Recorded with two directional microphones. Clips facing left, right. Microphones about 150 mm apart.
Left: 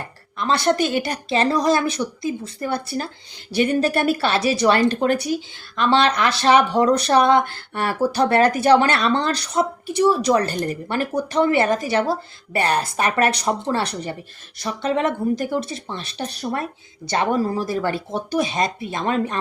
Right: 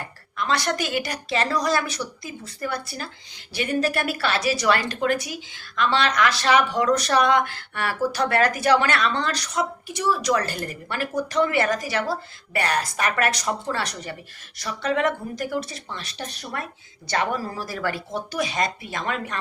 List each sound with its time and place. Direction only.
0.3 s a woman's voice: 25° left (ahead or behind)